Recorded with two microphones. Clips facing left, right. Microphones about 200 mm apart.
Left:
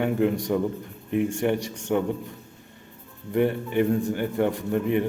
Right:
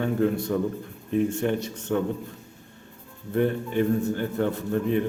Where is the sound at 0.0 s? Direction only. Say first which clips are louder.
Left 1 dB; 15° left (ahead or behind).